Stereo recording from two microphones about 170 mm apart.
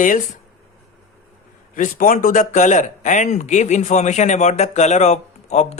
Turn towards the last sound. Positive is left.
turn(degrees=40)  # may be behind; listen again after turning